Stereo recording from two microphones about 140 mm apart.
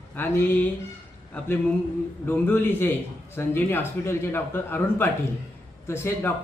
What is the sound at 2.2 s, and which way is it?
A man's voice, 15° left (ahead or behind).